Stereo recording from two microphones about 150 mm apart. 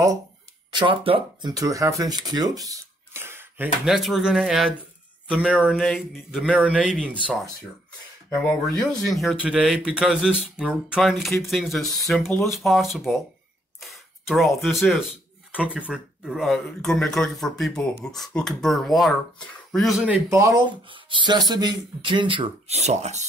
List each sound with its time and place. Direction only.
0.7 s speech: 35° right (ahead or behind)
1.5 s speech: 20° right (ahead or behind)
8.6 s speech: centre (ahead or behind)
20.2 s speech: 20° right (ahead or behind); by 23.2 s 50° right (ahead or behind)